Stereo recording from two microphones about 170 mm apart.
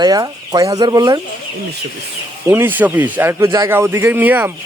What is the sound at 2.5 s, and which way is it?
A man's voice, 10° right (ahead or behind).